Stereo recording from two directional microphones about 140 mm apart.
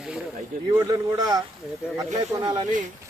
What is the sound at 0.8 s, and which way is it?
Speech, 25° right (ahead or behind).